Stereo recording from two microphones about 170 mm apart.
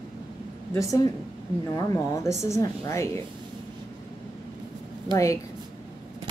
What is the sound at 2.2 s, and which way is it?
Speech, 15° left (ahead or behind).